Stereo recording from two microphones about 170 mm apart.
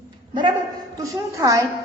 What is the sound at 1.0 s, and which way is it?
Speech, 20° right (ahead or behind).